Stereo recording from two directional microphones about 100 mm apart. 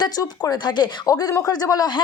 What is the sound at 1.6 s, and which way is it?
Speech, 35° left (ahead or behind).